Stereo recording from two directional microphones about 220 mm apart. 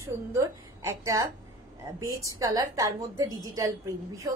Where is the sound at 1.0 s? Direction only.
15° right (ahead or behind).